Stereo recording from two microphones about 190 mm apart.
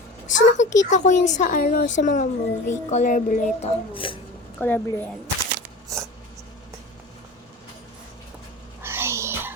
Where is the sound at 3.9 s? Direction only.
25° left (ahead or behind).